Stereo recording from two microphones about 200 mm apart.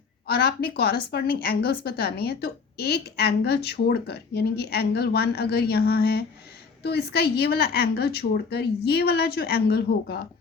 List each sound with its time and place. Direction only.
0.3 s a woman's voice: 50° left (ahead or behind)